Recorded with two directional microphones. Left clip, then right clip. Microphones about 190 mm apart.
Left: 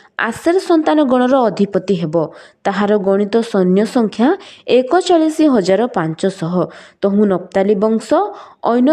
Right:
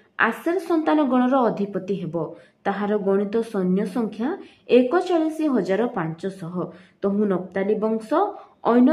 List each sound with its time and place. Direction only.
0.1 s a woman's voice: 45° left (ahead or behind)